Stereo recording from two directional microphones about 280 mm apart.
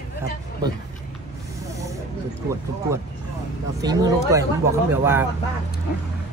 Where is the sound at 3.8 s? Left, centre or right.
Centre.